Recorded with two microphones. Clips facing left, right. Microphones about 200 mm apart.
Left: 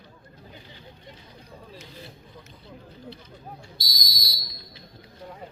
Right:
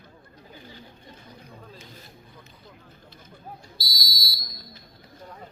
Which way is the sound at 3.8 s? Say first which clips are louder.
Right 1 dB; 20° left (ahead or behind).